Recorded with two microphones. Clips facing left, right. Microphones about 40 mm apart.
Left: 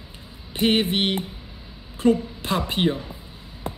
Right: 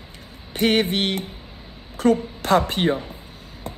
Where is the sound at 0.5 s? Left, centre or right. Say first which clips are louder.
Right 1 dB; left.